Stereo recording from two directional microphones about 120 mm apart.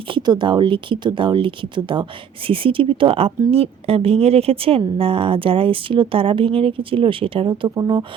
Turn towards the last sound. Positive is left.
turn(degrees=-30)  # may be behind; listen again after turning